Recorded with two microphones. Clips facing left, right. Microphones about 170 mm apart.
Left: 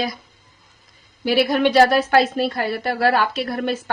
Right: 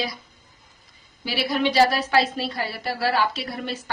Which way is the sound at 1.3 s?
55° left (ahead or behind).